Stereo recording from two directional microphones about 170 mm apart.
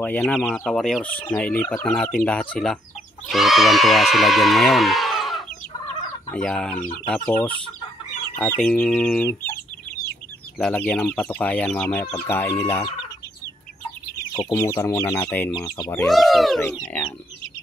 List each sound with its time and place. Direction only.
0.0 s speech: 5° left (ahead or behind)
8.5 s speech: 10° left (ahead or behind)
10.6 s speech: 10° left (ahead or behind)
14.3 s speech: 20° left (ahead or behind)